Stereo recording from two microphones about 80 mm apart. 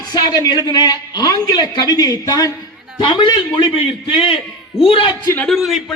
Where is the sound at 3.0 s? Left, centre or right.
Left.